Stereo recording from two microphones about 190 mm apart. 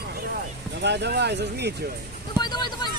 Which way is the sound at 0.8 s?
65° right (ahead or behind).